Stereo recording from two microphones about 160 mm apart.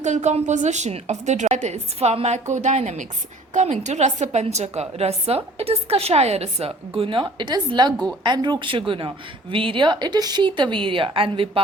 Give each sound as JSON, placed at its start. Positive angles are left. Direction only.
{"t": 0.0, "sound": "a woman's voice", "side_deg": -45}